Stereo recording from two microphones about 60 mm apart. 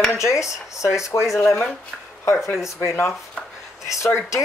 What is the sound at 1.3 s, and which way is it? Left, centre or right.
Speech, left.